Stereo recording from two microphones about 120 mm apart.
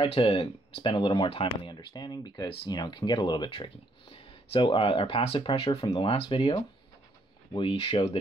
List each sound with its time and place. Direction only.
0.0 s speech: 50° left (ahead or behind)